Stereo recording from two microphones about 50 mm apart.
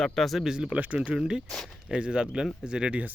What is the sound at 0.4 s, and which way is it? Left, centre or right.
Speech, centre.